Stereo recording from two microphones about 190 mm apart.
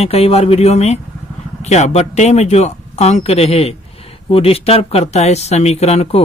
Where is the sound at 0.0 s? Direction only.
30° left (ahead or behind).